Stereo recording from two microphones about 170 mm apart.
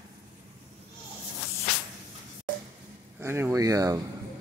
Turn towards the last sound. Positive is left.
turn(degrees=-20)  # may be behind; listen again after turning